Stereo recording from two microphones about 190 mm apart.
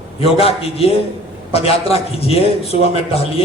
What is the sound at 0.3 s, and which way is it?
A man's voice, 30° left (ahead or behind).